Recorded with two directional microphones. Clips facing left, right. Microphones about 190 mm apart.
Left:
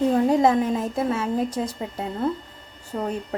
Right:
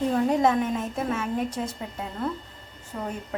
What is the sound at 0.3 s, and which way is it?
A woman's voice, 35° left (ahead or behind).